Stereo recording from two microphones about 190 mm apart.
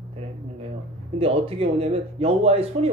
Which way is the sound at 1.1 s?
30° right (ahead or behind).